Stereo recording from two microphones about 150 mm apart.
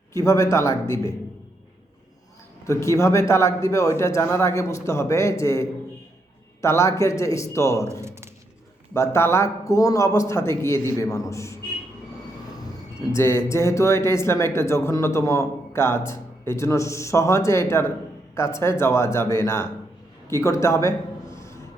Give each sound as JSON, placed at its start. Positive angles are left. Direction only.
{"t": 0.1, "sound": "a man's voice", "side_deg": 20}
{"t": 2.6, "sound": "a man's voice", "side_deg": 20}
{"t": 8.0, "sound": "a sound", "side_deg": -20}
{"t": 8.9, "sound": "a man's voice", "side_deg": 15}
{"t": 13.1, "sound": "a man's voice", "side_deg": 20}